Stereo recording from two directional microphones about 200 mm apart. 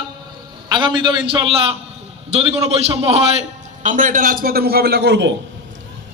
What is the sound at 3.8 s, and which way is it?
A man's voice, 40° right (ahead or behind).